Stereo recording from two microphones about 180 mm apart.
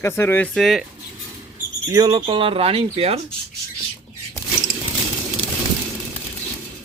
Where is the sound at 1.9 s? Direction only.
20° right (ahead or behind).